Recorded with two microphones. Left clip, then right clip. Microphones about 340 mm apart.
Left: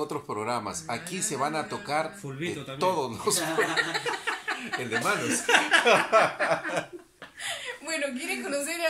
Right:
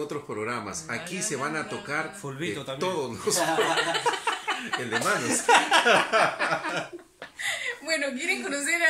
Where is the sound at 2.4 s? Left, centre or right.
Centre.